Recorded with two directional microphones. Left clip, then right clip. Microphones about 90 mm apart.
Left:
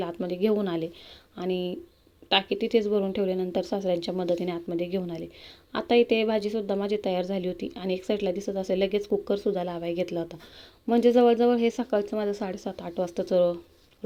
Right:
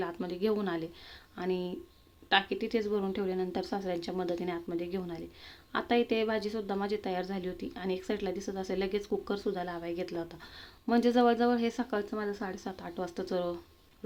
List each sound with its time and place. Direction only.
0.1 s a woman's voice: 30° left (ahead or behind)
10.8 s speech: 25° left (ahead or behind)